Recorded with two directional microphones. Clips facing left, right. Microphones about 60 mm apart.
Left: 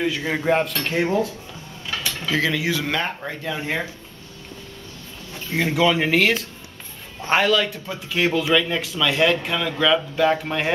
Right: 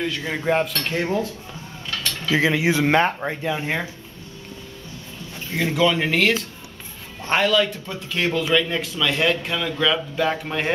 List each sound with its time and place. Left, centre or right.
0.0 s speech: centre
1.9 s a sound: centre
2.3 s speech: right
3.4 s speech: centre
5.3 s speech: centre